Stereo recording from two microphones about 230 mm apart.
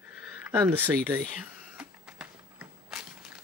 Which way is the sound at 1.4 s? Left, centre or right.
Centre.